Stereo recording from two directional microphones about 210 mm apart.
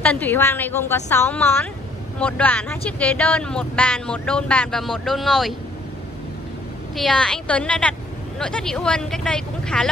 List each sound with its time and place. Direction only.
0.0 s a woman's voice: 10° left (ahead or behind)
7.0 s speech: 5° left (ahead or behind)